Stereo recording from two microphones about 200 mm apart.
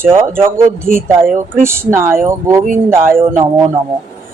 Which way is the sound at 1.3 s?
40° right (ahead or behind).